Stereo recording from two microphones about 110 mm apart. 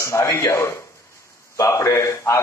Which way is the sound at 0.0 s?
25° left (ahead or behind).